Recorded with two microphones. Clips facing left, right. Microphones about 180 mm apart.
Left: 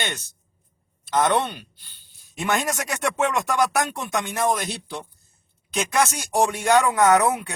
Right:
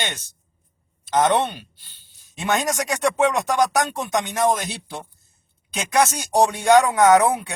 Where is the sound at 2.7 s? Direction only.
15° right (ahead or behind).